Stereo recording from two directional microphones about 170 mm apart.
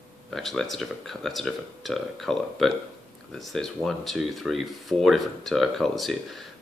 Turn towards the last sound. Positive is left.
turn(degrees=0)  # may be behind; listen again after turning